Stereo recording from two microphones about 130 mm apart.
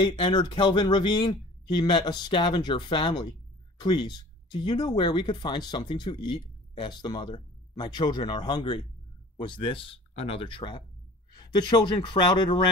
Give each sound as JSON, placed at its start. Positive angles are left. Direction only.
{"t": 0.0, "sound": "speech", "side_deg": 45}